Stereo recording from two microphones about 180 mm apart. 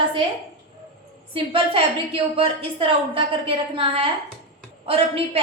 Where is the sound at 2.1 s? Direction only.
30° right (ahead or behind).